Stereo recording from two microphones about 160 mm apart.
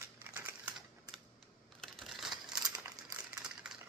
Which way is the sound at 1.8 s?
Centre (ahead or behind).